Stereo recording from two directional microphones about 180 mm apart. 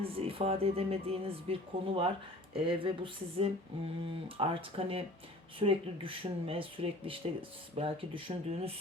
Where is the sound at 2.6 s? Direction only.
30° right (ahead or behind).